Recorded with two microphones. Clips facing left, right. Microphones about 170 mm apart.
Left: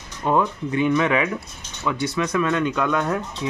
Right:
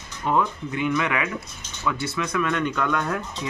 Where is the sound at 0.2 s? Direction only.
15° left (ahead or behind).